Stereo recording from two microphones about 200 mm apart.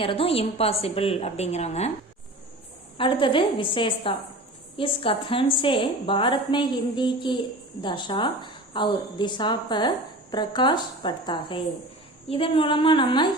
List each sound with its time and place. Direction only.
0.0 s a woman's voice: 25° left (ahead or behind)
3.0 s a woman's voice: 25° left (ahead or behind)